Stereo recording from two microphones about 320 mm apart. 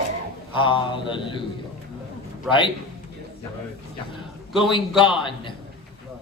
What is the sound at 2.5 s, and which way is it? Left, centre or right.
Speech, centre.